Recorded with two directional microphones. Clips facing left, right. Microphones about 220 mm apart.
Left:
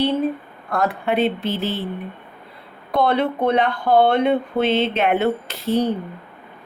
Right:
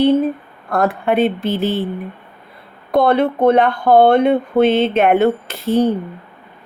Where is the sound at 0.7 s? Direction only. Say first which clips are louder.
Right 4 dB; 50° right (ahead or behind).